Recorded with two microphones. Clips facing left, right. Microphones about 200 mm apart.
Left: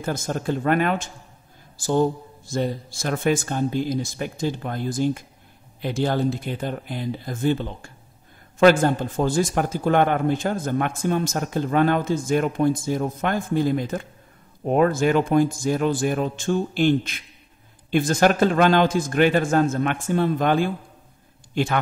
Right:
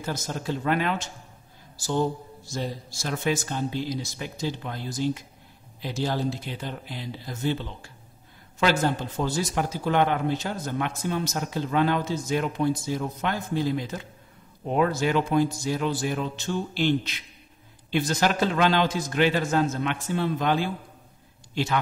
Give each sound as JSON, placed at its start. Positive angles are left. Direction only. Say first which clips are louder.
{"t": 0.0, "sound": "a man's voice", "louder": "left 5 dB", "side_deg": 50}